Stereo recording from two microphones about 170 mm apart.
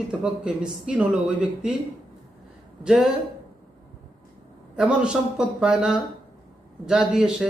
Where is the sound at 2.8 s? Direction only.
5° right (ahead or behind).